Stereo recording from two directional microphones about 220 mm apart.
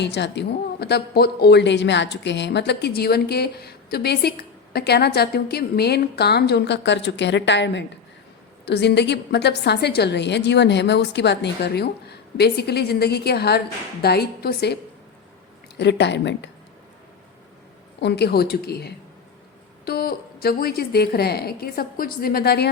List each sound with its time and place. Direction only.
0.0 s speech: 50° left (ahead or behind)
15.8 s speech: 50° left (ahead or behind)
18.0 s speech: 50° left (ahead or behind)